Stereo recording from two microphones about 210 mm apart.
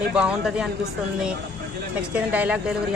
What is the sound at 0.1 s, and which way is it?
Speech, 5° right (ahead or behind).